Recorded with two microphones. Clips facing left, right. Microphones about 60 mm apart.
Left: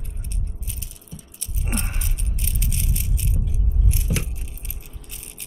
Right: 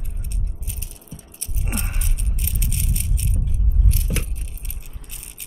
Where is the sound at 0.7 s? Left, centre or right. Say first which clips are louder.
Right 1 dB; right.